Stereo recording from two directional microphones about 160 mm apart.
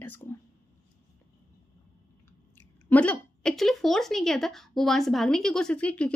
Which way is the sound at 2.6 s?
10° left (ahead or behind).